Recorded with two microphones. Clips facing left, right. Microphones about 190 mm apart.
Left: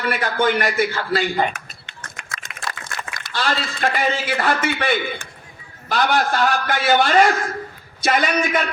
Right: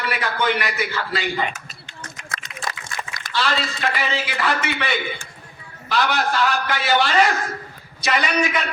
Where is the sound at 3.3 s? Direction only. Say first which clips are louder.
Even; 50° left (ahead or behind).